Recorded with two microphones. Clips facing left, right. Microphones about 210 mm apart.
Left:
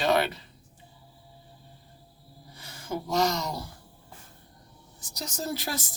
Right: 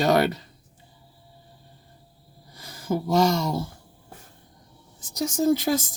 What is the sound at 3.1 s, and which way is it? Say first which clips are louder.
Speech: right 5 dB; 25° right (ahead or behind).